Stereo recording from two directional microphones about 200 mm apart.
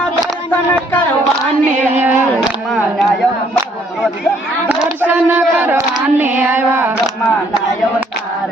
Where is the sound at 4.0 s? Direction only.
Centre (ahead or behind).